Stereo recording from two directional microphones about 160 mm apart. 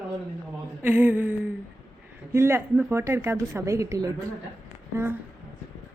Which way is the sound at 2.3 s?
15° right (ahead or behind).